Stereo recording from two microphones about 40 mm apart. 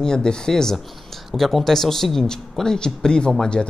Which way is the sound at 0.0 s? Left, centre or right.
Centre.